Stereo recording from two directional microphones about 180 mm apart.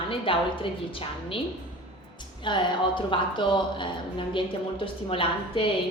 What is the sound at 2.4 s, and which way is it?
Speech, 25° left (ahead or behind).